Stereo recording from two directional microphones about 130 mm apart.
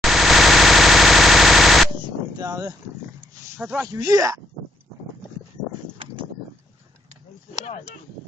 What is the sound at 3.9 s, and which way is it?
Speech, 25° right (ahead or behind).